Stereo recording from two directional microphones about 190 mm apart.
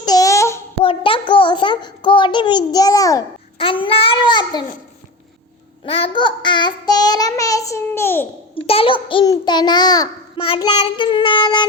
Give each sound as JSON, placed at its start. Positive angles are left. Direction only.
{"t": 0.0, "sound": "child singing", "side_deg": 20}
{"t": 0.9, "sound": "a sound", "side_deg": 25}
{"t": 3.6, "sound": "a child's voice", "side_deg": 30}
{"t": 5.8, "sound": "a child's voice", "side_deg": 30}
{"t": 8.6, "sound": "a child's voice", "side_deg": 30}